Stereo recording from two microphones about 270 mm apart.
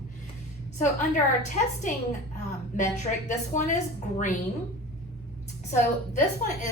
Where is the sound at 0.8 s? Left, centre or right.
Left.